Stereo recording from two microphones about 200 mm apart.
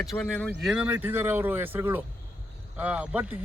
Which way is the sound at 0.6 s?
5° right (ahead or behind).